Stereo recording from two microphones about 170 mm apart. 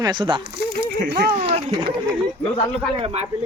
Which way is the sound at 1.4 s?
35° right (ahead or behind).